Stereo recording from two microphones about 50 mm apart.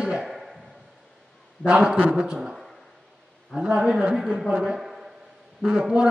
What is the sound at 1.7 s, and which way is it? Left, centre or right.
A man's voice, right.